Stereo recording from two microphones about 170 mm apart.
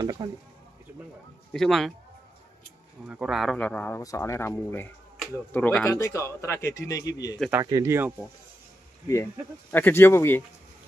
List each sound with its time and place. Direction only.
0.0 s speech: 25° right (ahead or behind)
1.5 s a man's voice: centre (ahead or behind)
3.1 s a man's voice: 5° right (ahead or behind); by 7.3 s 20° left (ahead or behind)
7.5 s speech: 20° right (ahead or behind)
9.0 s a man's voice: 15° left (ahead or behind)